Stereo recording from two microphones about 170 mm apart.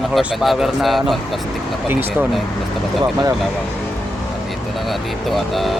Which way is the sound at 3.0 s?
20° right (ahead or behind).